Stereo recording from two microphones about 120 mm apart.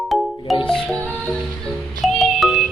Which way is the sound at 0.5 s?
50° left (ahead or behind).